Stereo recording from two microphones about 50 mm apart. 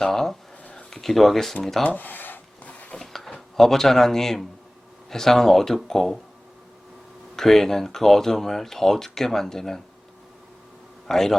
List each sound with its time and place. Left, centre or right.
0.0 s speech: centre
2.0 s a sound: left
2.6 s a sound: left
3.0 s drawer open or close: centre
5.1 s speech: centre
7.3 s speech: centre
11.1 s speech: centre